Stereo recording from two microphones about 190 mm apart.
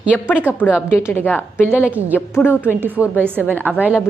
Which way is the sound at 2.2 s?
10° left (ahead or behind).